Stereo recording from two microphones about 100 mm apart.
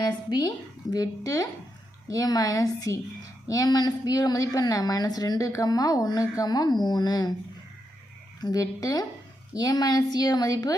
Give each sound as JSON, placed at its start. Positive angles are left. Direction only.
{"t": 0.0, "sound": "a woman's voice", "side_deg": 45}
{"t": 8.4, "sound": "a woman's voice", "side_deg": 40}